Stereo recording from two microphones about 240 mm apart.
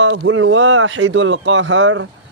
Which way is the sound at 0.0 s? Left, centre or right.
Right.